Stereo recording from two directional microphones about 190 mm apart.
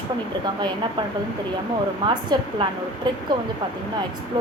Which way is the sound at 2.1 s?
20° right (ahead or behind).